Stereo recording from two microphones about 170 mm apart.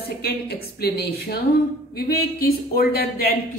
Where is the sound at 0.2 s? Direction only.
70° left (ahead or behind).